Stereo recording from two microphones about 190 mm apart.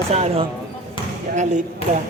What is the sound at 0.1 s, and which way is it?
Speech, 35° right (ahead or behind).